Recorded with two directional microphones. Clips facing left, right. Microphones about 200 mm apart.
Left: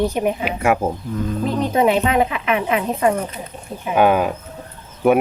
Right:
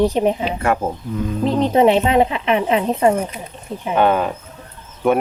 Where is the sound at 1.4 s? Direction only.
30° right (ahead or behind).